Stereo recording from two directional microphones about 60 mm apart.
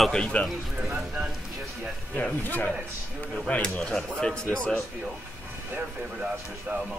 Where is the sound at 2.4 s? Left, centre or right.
Left.